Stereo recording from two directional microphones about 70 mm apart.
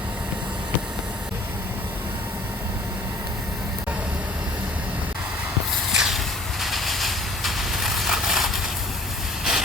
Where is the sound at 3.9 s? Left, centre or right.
Centre.